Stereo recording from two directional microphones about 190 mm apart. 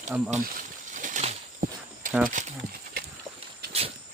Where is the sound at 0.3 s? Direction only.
45° right (ahead or behind).